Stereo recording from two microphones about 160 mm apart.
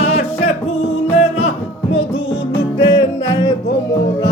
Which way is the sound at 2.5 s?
30° left (ahead or behind).